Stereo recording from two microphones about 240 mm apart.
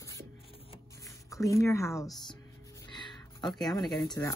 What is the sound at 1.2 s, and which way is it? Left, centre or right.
Speech, centre.